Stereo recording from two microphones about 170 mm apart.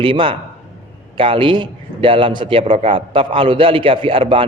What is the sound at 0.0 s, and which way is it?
A man's voice, 30° right (ahead or behind).